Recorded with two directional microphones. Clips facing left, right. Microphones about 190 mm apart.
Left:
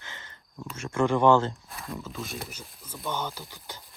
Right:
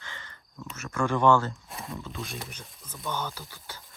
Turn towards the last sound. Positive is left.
turn(degrees=15)  # may be behind; listen again after turning